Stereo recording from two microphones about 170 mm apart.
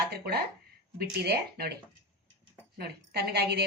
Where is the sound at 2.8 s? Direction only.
70° right (ahead or behind).